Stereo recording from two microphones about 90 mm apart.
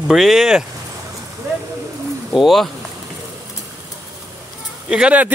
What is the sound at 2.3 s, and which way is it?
Speech, centre (ahead or behind).